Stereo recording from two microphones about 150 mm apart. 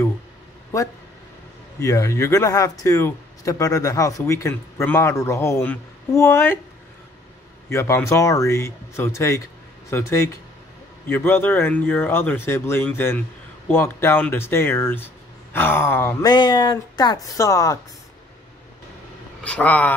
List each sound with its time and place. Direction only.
1.8 s speech: 20° left (ahead or behind)
7.7 s speech: 20° left (ahead or behind)
16.3 s speech: 30° left (ahead or behind)
19.4 s speech: 10° left (ahead or behind)